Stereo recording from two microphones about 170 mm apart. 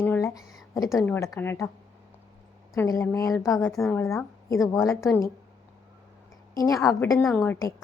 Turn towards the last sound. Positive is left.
turn(degrees=20)  # may be behind; listen again after turning